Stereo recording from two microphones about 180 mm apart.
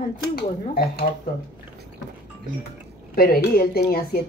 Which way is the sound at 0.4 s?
55° left (ahead or behind).